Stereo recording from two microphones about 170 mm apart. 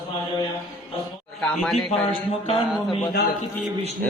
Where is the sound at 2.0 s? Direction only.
35° left (ahead or behind).